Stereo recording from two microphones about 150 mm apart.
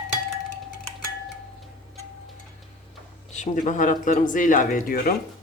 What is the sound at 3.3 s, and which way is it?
Speech, 55° left (ahead or behind).